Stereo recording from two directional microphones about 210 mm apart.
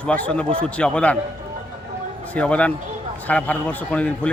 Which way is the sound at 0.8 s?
5° left (ahead or behind).